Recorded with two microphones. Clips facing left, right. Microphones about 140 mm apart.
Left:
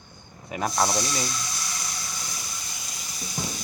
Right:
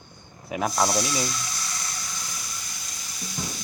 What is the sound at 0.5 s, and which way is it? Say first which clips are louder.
Speech: right 1 dB; centre (ahead or behind).